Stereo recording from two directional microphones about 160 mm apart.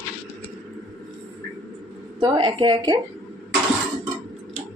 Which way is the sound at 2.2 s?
30° right (ahead or behind).